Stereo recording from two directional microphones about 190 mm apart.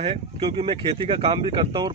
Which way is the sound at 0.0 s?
30° right (ahead or behind).